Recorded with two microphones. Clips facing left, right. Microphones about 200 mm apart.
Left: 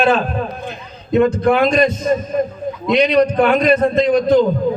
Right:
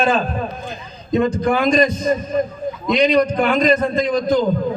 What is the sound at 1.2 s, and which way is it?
Speech, 65° left (ahead or behind).